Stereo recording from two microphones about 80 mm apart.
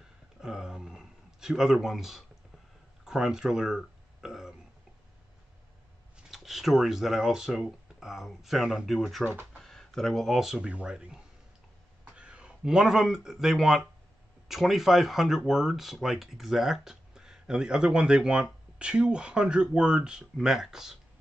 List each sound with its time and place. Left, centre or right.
0.4 s a sound: centre
6.1 s speech: centre
9.3 s speech: right
9.6 s speech: centre
12.2 s speech: centre